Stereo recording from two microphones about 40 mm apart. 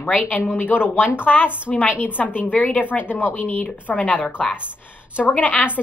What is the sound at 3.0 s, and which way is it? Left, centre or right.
Speech, left.